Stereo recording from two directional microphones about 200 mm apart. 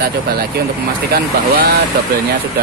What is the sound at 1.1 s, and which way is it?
Speech, 50° right (ahead or behind).